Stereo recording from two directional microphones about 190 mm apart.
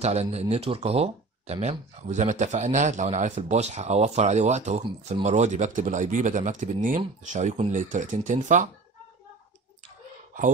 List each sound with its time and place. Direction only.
0.0 s speech: 35° right (ahead or behind)